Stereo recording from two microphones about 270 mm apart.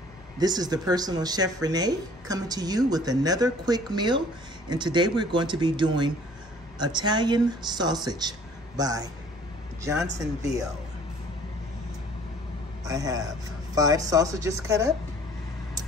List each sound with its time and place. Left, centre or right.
0.4 s speech: centre
12.8 s speech: centre